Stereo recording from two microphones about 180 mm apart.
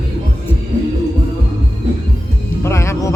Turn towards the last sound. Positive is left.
turn(degrees=15)  # may be behind; listen again after turning